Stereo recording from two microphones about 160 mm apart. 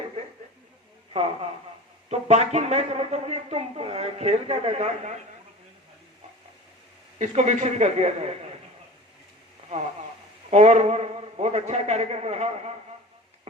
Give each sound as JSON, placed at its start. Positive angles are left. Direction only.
{"t": 1.1, "sound": "speech", "side_deg": -40}
{"t": 7.2, "sound": "a man's voice", "side_deg": -45}
{"t": 10.5, "sound": "a man's voice", "side_deg": -45}